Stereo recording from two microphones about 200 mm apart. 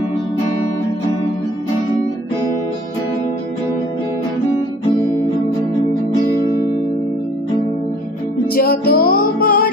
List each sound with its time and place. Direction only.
6.4 s music: 20° right (ahead or behind)
8.5 s music: 50° left (ahead or behind)